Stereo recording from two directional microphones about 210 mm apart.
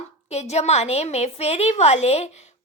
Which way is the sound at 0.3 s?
30° left (ahead or behind).